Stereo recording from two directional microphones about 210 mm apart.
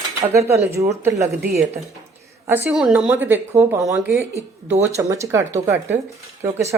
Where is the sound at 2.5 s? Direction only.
5° right (ahead or behind).